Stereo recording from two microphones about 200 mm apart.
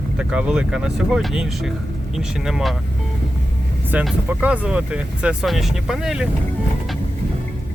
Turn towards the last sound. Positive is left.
turn(degrees=-5)  # may be behind; listen again after turning